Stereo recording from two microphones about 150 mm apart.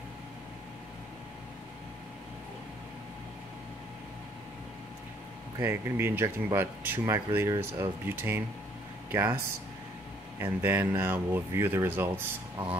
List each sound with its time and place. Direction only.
5.6 s speech: 15° right (ahead or behind)
10.4 s speech: 15° right (ahead or behind)